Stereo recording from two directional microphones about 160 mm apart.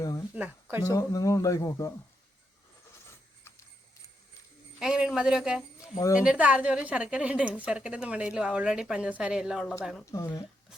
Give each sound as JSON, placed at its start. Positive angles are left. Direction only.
{"t": 0.3, "sound": "speech", "side_deg": -10}
{"t": 0.8, "sound": "speech", "side_deg": 20}
{"t": 4.8, "sound": "a woman's voice", "side_deg": -5}
{"t": 10.1, "sound": "speech", "side_deg": 20}